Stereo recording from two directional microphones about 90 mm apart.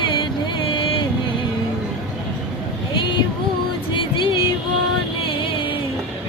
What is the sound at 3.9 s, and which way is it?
Music, 70° left (ahead or behind).